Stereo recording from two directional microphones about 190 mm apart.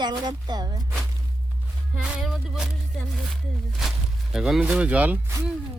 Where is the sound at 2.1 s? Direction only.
Centre (ahead or behind).